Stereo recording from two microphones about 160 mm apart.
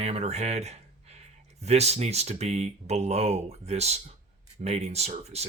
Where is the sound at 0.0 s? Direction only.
40° right (ahead or behind).